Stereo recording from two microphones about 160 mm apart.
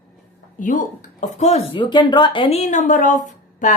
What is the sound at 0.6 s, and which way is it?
A woman's voice, 55° left (ahead or behind).